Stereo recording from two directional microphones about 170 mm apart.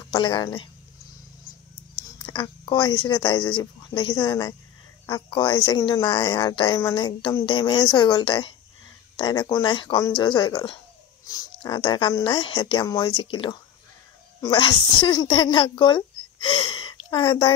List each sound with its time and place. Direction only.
0.1 s speech: 25° left (ahead or behind)
2.2 s speech: 25° left (ahead or behind)